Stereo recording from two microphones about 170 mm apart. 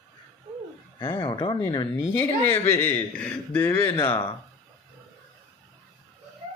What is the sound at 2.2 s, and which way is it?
Speech, 10° left (ahead or behind).